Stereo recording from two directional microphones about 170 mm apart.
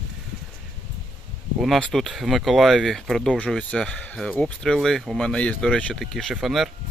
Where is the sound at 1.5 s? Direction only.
Centre (ahead or behind).